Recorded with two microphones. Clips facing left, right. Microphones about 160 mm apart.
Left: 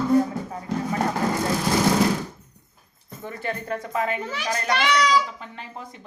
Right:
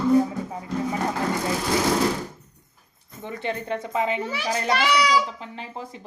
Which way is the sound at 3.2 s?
20° right (ahead or behind).